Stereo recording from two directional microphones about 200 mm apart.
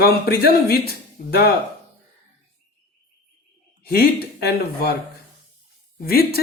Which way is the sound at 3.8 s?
50° left (ahead or behind).